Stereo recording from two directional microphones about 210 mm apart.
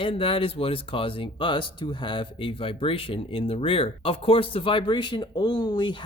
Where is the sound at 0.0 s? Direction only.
25° left (ahead or behind).